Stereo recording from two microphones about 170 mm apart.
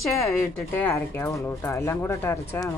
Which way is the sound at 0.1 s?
15° left (ahead or behind).